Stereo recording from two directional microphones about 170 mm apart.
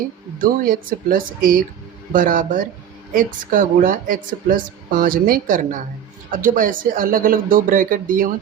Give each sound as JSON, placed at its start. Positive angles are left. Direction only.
{"t": 0.3, "sound": "a woman's voice", "side_deg": -55}